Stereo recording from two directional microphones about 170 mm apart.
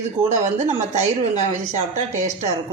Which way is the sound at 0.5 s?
40° right (ahead or behind).